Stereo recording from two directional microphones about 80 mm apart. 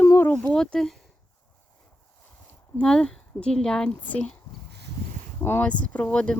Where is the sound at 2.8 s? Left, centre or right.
Centre.